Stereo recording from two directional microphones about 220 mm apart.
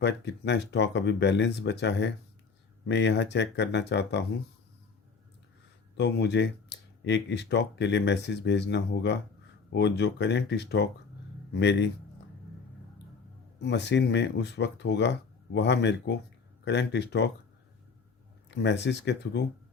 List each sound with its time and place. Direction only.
0.0 s speech: 50° left (ahead or behind)
6.0 s speech: 50° left (ahead or behind)
13.6 s speech: 50° left (ahead or behind)
18.5 s speech: 50° left (ahead or behind)